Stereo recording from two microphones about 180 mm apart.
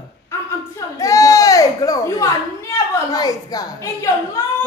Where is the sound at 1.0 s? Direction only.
20° left (ahead or behind).